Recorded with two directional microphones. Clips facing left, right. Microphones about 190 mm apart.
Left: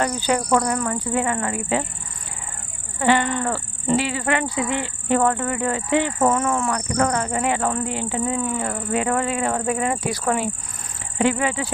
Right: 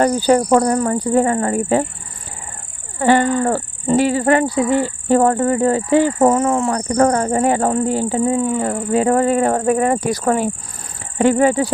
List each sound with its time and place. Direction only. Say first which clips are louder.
0.0 s speech: right 8 dB; 40° right (ahead or behind)
3.0 s a sound: right 5 dB; 40° right (ahead or behind)
3.4 s speech: right 6 dB; 40° right (ahead or behind)